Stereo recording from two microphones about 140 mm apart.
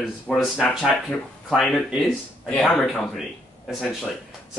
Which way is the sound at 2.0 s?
10° left (ahead or behind).